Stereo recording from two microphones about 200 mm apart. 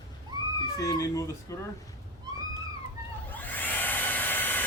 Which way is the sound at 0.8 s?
15° left (ahead or behind).